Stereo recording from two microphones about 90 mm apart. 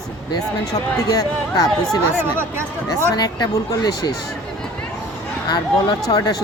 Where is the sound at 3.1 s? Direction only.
50° left (ahead or behind).